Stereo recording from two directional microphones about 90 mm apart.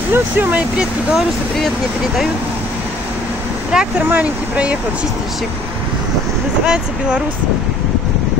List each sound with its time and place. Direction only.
0.1 s speech: 20° right (ahead or behind)
3.7 s speech: 10° right (ahead or behind)
6.6 s speech: 10° right (ahead or behind)